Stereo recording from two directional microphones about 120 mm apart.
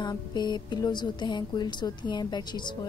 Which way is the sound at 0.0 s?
35° left (ahead or behind).